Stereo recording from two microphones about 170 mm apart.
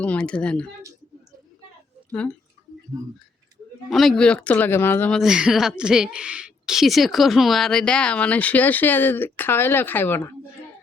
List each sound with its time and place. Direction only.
0.0 s speech: 5° left (ahead or behind)
3.8 s speech: centre (ahead or behind)
5.2 s a woman's voice: 5° right (ahead or behind); by 10.3 s 10° left (ahead or behind)